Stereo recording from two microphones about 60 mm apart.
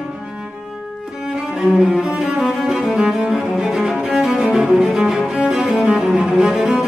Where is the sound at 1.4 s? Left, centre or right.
Centre.